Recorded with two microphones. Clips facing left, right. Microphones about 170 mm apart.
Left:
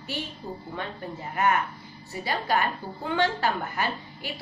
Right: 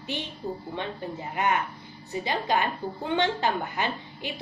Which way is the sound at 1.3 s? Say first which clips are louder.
Left 2 dB; 20° right (ahead or behind).